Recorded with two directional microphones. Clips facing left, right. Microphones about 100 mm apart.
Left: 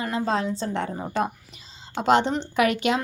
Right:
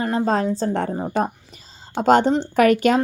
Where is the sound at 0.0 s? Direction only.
40° right (ahead or behind).